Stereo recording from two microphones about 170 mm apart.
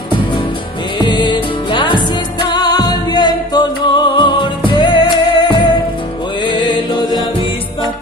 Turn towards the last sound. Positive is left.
turn(degrees=25)  # may be behind; listen again after turning